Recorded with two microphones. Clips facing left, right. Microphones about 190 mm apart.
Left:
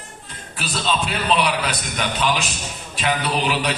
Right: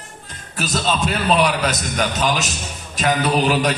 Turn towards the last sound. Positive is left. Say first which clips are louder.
# right 4 dB
turn(degrees=-45)  # may be behind; listen again after turning